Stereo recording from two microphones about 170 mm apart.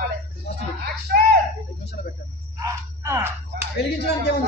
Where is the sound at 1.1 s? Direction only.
65° right (ahead or behind).